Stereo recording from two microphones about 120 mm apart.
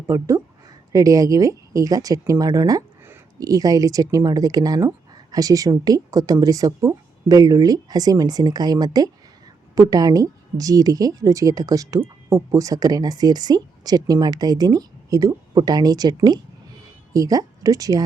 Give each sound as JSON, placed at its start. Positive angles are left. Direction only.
{"t": 0.1, "sound": "a woman's voice", "side_deg": -25}